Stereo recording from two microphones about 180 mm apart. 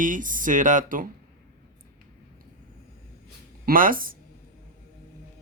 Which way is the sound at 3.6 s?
50° right (ahead or behind).